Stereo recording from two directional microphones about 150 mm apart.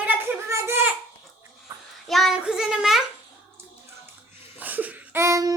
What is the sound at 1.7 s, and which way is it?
Child singing, 20° right (ahead or behind).